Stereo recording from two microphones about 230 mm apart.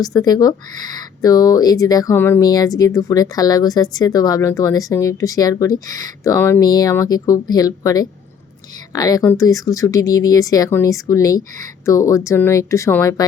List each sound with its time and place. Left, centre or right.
0.0 s speech: centre